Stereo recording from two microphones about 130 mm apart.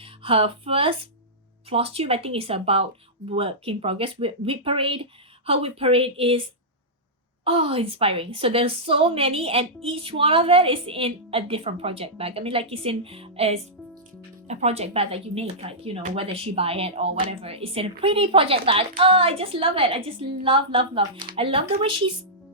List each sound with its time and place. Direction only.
0.0 s a woman's voice: 45° right (ahead or behind)
7.4 s a woman's voice: 45° right (ahead or behind)